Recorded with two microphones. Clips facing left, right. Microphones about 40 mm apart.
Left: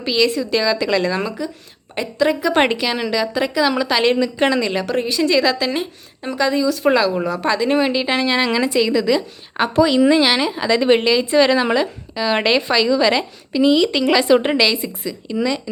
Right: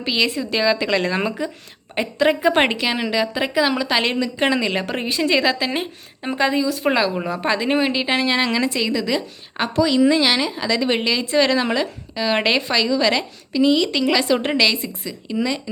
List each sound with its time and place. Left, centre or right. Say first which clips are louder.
0.0 s a woman's voice: left 3 dB; centre
1.1 s speech: even; right
2.8 s a woman's voice: left 1 dB; centre
4.1 s a woman's voice: left 4 dB; centre
4.4 s a woman's voice: even; centre
4.8 s a woman's voice: left 3 dB; right
6.7 s a woman's voice: left 3 dB; centre
7.8 s a woman's voice: left 2 dB; centre
9.7 s a woman's voice: left 2 dB; centre